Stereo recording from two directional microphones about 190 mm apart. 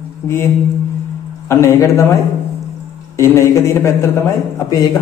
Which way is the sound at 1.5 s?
15° left (ahead or behind).